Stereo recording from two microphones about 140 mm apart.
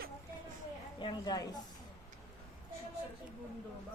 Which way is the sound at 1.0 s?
30° left (ahead or behind).